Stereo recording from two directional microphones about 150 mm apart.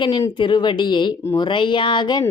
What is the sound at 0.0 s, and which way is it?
Speech, 30° left (ahead or behind).